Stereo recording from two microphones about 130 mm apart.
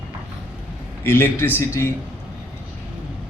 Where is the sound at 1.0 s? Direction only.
15° left (ahead or behind).